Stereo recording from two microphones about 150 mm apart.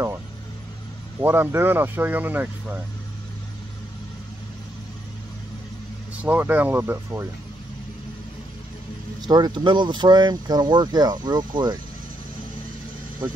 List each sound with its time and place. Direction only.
1.2 s speech: 15° right (ahead or behind)
6.1 s speech: 10° right (ahead or behind)
9.2 s speech: 25° right (ahead or behind)